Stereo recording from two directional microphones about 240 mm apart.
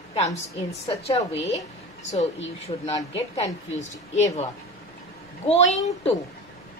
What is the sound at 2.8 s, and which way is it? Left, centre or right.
A woman's voice, left.